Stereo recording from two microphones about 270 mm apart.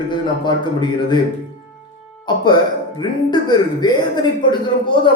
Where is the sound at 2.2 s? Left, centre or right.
Centre.